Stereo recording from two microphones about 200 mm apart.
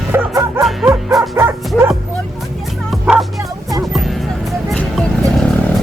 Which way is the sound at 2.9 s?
Centre (ahead or behind).